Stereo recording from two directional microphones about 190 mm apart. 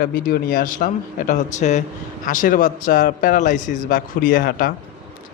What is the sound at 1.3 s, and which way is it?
A man's voice, 40° left (ahead or behind).